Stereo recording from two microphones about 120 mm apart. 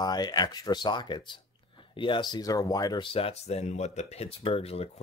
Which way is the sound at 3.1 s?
50° left (ahead or behind).